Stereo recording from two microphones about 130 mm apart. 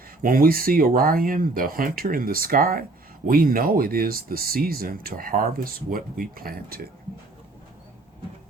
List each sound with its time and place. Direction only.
0.2 s speech: 90° right